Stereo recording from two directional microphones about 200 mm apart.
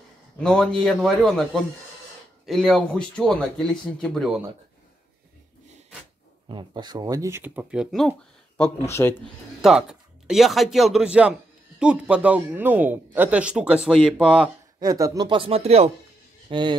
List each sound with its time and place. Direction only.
0.4 s speech: 5° left (ahead or behind)
6.5 s speech: 20° right (ahead or behind); by 8.1 s centre (ahead or behind)
9.1 s speech: centre (ahead or behind)
14.8 s speech: 15° right (ahead or behind)